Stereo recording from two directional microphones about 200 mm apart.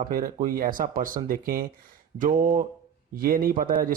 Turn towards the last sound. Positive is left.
turn(degrees=-45)  # may be behind; listen again after turning